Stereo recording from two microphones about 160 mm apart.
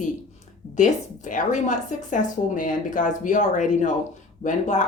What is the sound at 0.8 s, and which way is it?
Speech, 50° left (ahead or behind).